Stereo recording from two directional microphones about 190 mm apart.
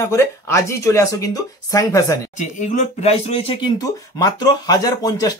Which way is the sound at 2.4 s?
40° left (ahead or behind).